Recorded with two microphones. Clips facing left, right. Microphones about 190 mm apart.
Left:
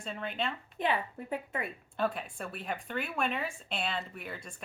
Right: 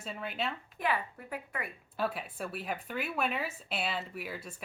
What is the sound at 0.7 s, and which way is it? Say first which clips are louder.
Speech: left 3 dB; 25° left (ahead or behind).